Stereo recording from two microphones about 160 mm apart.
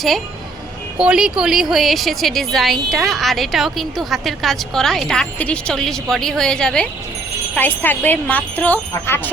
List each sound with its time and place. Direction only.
0.9 s a woman's voice: 5° right (ahead or behind); by 9.3 s 10° left (ahead or behind)